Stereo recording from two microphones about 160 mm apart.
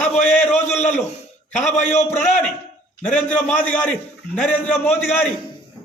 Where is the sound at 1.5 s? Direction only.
45° left (ahead or behind).